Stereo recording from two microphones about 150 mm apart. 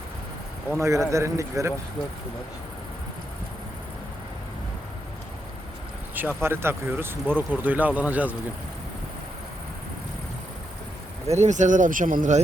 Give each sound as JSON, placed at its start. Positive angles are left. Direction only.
{"t": 0.8, "sound": "a man's voice", "side_deg": -20}
{"t": 6.1, "sound": "speech", "side_deg": -15}
{"t": 11.3, "sound": "speech", "side_deg": -50}